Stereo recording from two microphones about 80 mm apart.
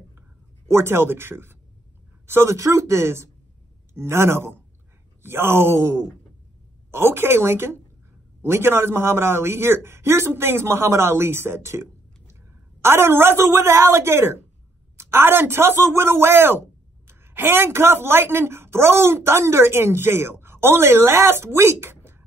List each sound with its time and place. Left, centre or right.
0.7 s a woman's voice: right